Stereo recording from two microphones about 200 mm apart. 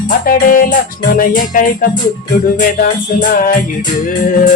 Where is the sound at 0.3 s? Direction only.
45° left (ahead or behind).